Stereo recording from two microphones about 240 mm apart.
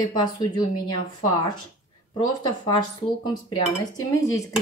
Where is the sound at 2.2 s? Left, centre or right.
Centre.